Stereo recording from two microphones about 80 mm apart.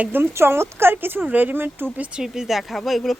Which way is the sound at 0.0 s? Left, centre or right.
Right.